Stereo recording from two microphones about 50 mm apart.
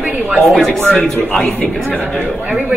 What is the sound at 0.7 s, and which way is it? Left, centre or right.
Speech, centre.